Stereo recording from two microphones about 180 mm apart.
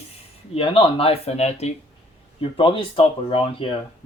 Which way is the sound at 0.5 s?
30° left (ahead or behind).